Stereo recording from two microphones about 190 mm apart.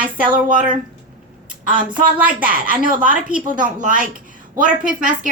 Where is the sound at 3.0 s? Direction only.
5° right (ahead or behind).